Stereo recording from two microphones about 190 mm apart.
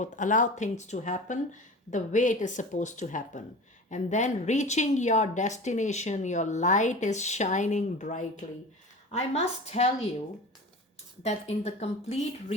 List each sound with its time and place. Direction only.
0.0 s a woman's voice: 40° left (ahead or behind)
11.2 s a woman's voice: 35° left (ahead or behind)